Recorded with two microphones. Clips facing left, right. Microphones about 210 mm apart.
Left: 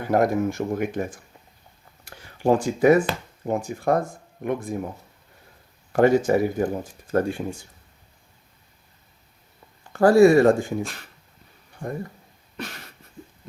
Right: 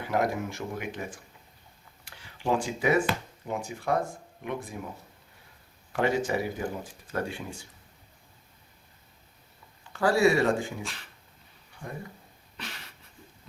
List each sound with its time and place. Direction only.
0.0 s speech: 45° left (ahead or behind)
5.9 s speech: 45° left (ahead or behind)
9.9 s speech: 45° left (ahead or behind)
12.5 s a sound: 45° left (ahead or behind)